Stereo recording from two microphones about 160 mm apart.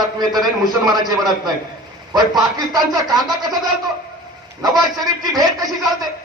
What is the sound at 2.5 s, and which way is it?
A man's voice, 25° right (ahead or behind).